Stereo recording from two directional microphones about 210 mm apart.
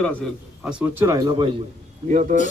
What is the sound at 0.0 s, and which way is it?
A man's voice, 5° left (ahead or behind).